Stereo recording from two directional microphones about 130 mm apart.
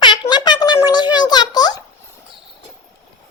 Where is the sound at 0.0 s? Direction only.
35° left (ahead or behind).